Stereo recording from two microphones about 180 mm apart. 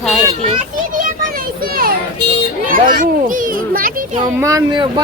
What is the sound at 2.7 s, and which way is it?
A child's voice, 50° right (ahead or behind).